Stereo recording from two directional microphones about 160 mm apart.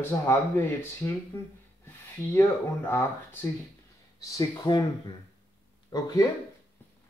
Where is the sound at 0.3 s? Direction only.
15° left (ahead or behind).